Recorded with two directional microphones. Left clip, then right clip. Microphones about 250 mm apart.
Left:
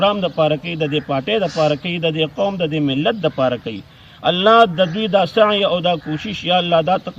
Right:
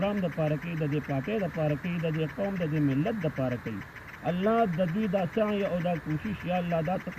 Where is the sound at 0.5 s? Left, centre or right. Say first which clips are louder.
Left 13 dB; left.